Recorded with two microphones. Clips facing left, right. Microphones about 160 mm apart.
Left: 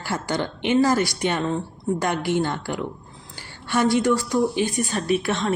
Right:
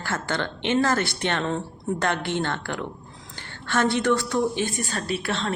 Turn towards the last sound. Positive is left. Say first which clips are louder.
# left 5 dB
turn(degrees=20)  # may be behind; listen again after turning